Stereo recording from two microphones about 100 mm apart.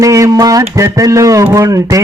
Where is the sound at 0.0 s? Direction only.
35° right (ahead or behind).